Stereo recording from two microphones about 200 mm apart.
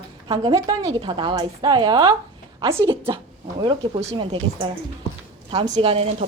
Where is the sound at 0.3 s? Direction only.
20° right (ahead or behind).